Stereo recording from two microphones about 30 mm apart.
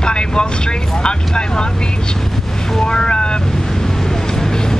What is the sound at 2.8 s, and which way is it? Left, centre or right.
Boat, left.